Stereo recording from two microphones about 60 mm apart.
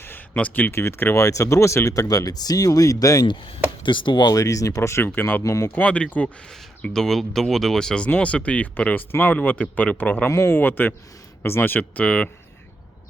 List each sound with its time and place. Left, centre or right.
0.0 s a sound: left
0.3 s speech: left
0.7 s speech: left
1.1 s speech: left
1.9 s speech: left
4.3 s speech: left
5.0 s speech: left
5.5 s speech: left
5.7 s speech: left
6.9 s speech: centre
8.0 s speech: left
10.2 s speech: left; by 12.3 s centre